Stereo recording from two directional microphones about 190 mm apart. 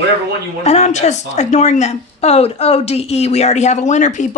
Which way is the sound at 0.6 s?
35° left (ahead or behind).